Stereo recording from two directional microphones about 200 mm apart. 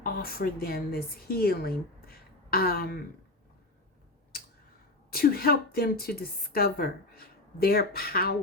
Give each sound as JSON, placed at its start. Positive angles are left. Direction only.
{"t": 0.0, "sound": "speech", "side_deg": 50}
{"t": 5.1, "sound": "a woman's voice", "side_deg": 50}